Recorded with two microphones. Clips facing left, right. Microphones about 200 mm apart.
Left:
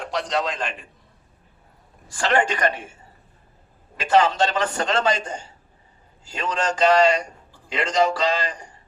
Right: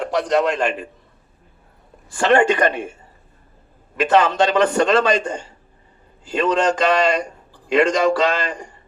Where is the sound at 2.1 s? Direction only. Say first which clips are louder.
Right 6 dB; 55° right (ahead or behind).